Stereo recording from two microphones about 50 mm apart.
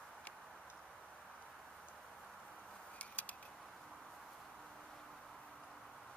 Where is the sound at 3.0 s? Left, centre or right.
Left.